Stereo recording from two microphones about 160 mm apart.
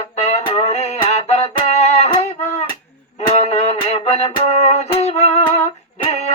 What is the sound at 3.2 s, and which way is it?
Music, 40° left (ahead or behind).